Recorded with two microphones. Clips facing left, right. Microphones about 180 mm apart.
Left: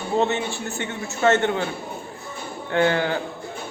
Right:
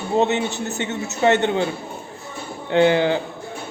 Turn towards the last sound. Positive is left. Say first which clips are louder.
# right 4 dB
turn(degrees=-20)  # may be behind; listen again after turning